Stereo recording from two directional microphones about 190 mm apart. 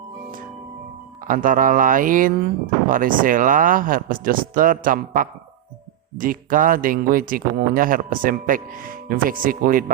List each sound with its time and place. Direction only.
1.3 s speech: 45° right (ahead or behind)